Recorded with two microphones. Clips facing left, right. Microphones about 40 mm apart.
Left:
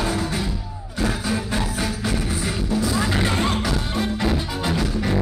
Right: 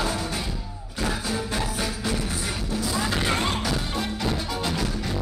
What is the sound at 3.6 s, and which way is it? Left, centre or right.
Music, centre.